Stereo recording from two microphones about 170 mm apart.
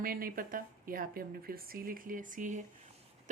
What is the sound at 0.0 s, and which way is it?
A woman's voice, 60° right (ahead or behind).